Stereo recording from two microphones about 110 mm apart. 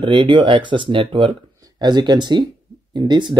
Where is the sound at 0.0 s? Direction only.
45° right (ahead or behind).